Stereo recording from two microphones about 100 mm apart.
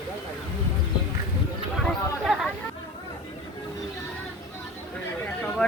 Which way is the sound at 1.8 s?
Centre (ahead or behind).